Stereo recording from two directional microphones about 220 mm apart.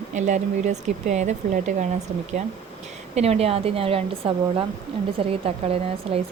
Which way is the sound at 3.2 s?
30° right (ahead or behind).